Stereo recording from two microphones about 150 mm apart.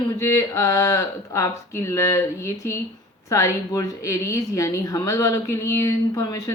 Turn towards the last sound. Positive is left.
turn(degrees=25)  # may be behind; listen again after turning